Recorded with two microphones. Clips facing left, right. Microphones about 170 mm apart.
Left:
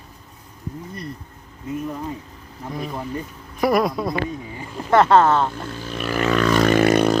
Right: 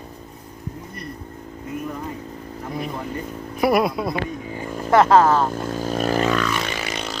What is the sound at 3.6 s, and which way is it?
Speech, 10° right (ahead or behind).